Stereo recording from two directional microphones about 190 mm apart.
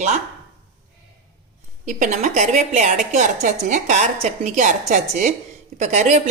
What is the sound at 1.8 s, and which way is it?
Speech, 40° right (ahead or behind).